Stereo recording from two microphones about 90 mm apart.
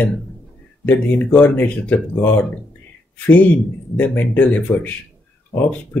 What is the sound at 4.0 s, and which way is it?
Speech, 20° left (ahead or behind).